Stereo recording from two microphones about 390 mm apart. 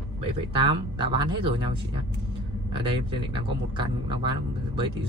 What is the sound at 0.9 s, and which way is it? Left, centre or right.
Speech, centre.